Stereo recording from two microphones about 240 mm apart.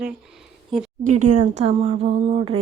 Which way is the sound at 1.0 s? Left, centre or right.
Right.